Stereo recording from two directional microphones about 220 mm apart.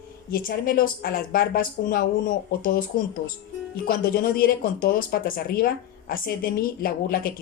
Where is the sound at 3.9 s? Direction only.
40° left (ahead or behind).